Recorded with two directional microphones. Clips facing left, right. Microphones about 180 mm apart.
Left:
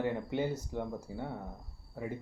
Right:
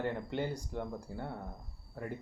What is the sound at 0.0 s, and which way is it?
Speech, 5° left (ahead or behind).